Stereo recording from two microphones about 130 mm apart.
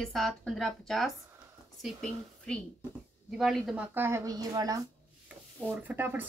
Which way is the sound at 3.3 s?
Centre (ahead or behind).